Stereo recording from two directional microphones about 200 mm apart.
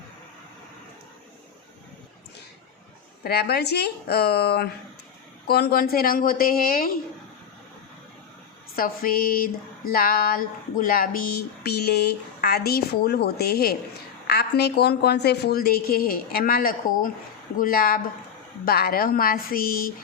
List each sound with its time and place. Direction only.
3.2 s speech: 50° left (ahead or behind)
8.7 s speech: 45° left (ahead or behind)